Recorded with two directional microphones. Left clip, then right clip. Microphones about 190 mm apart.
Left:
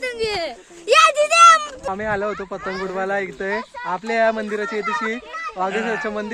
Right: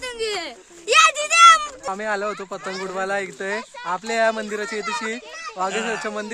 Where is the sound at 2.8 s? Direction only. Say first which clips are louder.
Left 1 dB; 5° right (ahead or behind).